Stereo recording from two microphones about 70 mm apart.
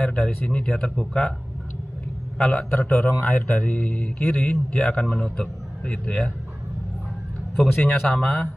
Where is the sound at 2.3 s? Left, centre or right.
Centre.